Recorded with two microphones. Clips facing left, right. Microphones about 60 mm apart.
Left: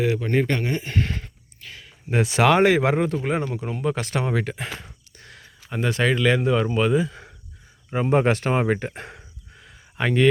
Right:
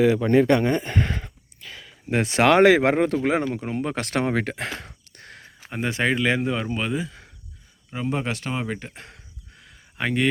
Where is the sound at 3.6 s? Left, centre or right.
Right.